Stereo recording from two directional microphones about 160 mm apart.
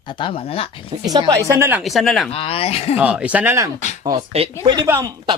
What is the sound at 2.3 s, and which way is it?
Speech, 35° left (ahead or behind).